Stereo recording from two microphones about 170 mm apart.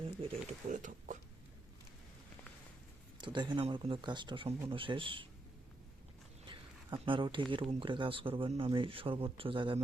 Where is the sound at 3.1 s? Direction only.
25° right (ahead or behind).